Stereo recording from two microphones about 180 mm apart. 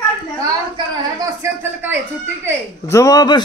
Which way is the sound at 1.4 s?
10° right (ahead or behind).